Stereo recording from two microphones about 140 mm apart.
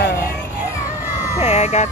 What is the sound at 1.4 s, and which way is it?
Vehicle, 55° left (ahead or behind).